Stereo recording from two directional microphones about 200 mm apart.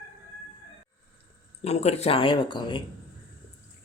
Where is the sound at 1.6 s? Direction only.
35° left (ahead or behind).